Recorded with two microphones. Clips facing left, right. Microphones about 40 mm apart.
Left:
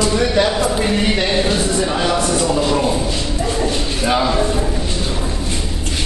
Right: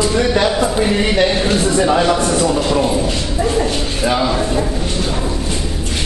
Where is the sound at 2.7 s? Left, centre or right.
Centre.